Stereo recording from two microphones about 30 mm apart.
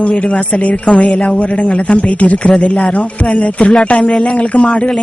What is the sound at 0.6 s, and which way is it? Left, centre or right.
Speech, left.